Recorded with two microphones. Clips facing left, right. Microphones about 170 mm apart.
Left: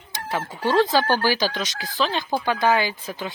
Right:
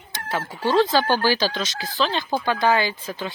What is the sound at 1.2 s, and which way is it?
Speech, 15° left (ahead or behind).